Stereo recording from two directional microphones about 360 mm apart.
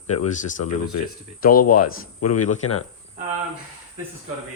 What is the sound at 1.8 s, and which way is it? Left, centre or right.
Speech, left.